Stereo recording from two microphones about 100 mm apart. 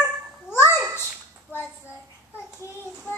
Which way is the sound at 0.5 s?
25° left (ahead or behind).